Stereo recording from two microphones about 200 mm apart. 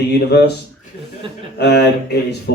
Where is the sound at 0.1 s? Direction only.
55° left (ahead or behind).